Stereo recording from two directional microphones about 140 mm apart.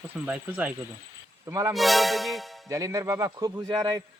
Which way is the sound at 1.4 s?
20° right (ahead or behind).